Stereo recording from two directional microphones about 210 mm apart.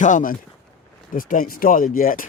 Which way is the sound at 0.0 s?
40° left (ahead or behind).